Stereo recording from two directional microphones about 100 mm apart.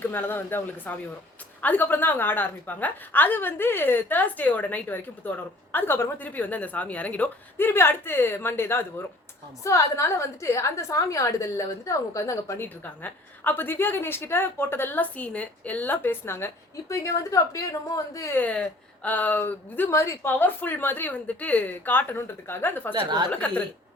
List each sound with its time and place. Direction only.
0.0 s a woman's voice: 20° left (ahead or behind)
12.6 s a woman's voice: 20° left (ahead or behind)
18.3 s a woman's voice: 15° left (ahead or behind)
22.9 s a woman's voice: 50° right (ahead or behind)
23.3 s speech: 15° left (ahead or behind)